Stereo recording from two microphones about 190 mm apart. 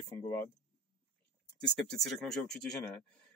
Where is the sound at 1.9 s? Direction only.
Centre (ahead or behind).